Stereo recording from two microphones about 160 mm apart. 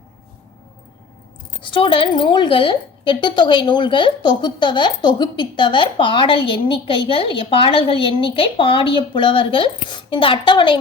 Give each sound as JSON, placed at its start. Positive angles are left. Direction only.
{"t": 1.6, "sound": "a woman's voice", "side_deg": 30}